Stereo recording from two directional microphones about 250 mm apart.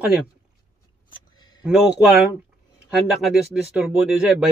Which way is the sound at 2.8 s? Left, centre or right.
Centre.